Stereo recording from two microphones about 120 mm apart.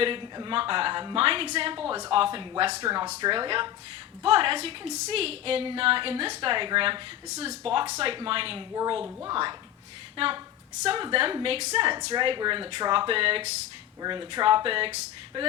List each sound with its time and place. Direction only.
0.0 s a woman's voice: 40° right (ahead or behind)
7.3 s a woman's voice: 60° right (ahead or behind)
12.1 s a woman's voice: 40° right (ahead or behind)
14.0 s a woman's voice: 40° right (ahead or behind)